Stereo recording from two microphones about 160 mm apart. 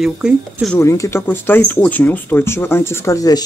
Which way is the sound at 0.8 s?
20° left (ahead or behind).